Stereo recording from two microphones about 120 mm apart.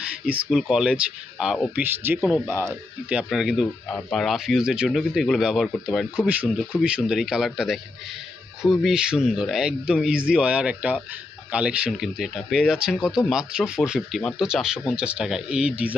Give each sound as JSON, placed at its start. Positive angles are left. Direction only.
{"t": 0.3, "sound": "speech", "side_deg": -10}
{"t": 3.1, "sound": "speech", "side_deg": -5}
{"t": 6.2, "sound": "speech", "side_deg": -10}